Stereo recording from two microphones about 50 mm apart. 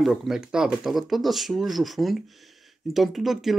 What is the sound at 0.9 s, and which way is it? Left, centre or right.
Speech, centre.